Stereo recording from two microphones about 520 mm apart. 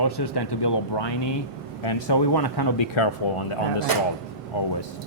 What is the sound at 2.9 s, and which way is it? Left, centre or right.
Speech, left.